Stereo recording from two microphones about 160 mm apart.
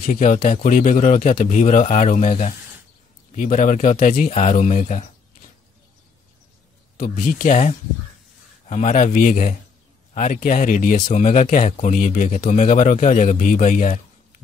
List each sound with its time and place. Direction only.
0.0 s a man's voice: 55° left (ahead or behind)
7.0 s a man's voice: 55° left (ahead or behind)